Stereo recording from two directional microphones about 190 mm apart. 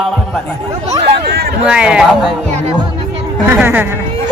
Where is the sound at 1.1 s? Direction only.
60° right (ahead or behind).